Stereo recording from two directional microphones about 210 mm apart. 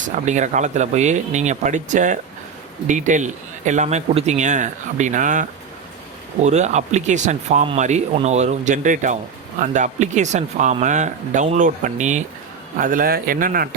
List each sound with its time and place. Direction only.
0.3 s a man's voice: 35° right (ahead or behind)